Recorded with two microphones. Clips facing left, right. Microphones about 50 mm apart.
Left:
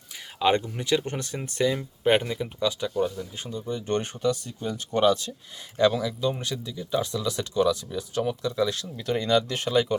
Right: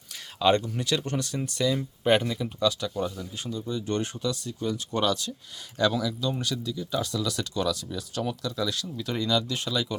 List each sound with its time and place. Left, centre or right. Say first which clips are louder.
0.3 s speech: even; centre
3.4 s speech: right 1 dB; left